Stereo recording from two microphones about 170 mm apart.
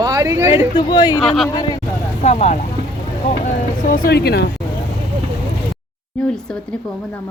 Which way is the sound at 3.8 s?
60° left (ahead or behind).